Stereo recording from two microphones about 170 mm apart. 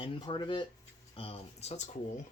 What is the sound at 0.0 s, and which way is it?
Speech, 30° left (ahead or behind).